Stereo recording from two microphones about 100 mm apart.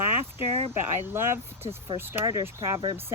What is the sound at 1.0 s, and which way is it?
Speech, 25° right (ahead or behind).